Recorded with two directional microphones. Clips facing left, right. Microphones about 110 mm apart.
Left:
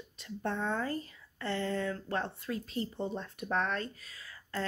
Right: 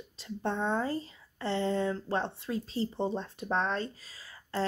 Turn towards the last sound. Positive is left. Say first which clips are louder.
# right 5 dB
turn(degrees=-25)  # may be behind; listen again after turning